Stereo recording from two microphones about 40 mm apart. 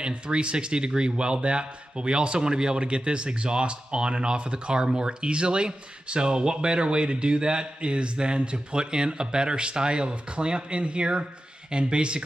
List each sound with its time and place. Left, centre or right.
0.0 s speech: right